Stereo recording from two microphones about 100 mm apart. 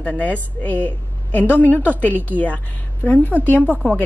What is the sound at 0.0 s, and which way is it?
A woman's voice, 15° left (ahead or behind).